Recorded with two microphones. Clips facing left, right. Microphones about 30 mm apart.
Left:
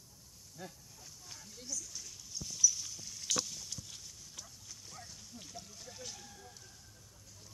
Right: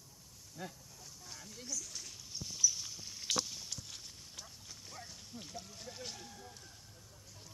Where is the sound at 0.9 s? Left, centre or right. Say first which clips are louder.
Right 1 dB; centre.